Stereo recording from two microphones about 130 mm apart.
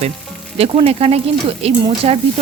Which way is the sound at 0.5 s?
50° right (ahead or behind).